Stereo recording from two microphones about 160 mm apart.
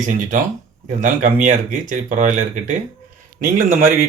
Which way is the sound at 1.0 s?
55° right (ahead or behind).